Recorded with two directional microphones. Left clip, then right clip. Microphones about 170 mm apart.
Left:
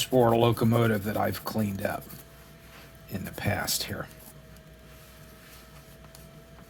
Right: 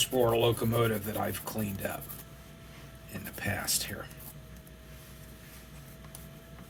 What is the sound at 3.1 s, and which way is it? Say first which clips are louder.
Speech: left 4 dB; 55° left (ahead or behind).